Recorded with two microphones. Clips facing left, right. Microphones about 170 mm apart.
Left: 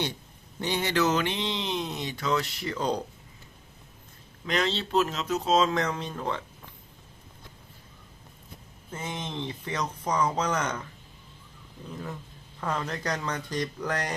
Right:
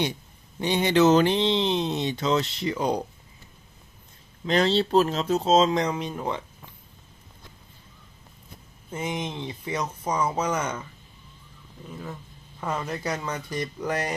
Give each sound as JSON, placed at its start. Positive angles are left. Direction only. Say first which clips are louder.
{"t": 0.6, "sound": "speech", "louder": "right 6 dB", "side_deg": -20}
{"t": 2.7, "sound": "speech", "louder": "right 2 dB", "side_deg": -10}
{"t": 4.4, "sound": "speech", "louder": "right 6 dB", "side_deg": -35}
{"t": 8.9, "sound": "speech", "louder": "right 5 dB", "side_deg": -15}
{"t": 11.9, "sound": "speech", "louder": "even", "side_deg": -5}